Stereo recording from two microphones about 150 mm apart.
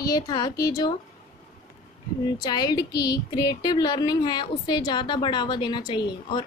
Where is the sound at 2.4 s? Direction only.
25° left (ahead or behind).